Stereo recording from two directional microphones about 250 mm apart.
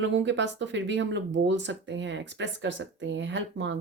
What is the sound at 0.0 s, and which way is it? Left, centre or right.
Speech, right.